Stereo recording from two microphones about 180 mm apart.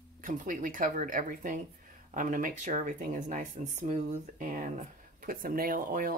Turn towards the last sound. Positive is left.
turn(degrees=-50)  # may be behind; listen again after turning